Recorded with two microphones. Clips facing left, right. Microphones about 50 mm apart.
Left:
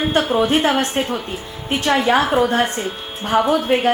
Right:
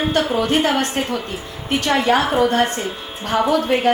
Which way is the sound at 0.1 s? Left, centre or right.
Left.